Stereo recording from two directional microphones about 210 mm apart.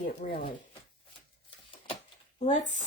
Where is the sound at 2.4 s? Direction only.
35° left (ahead or behind).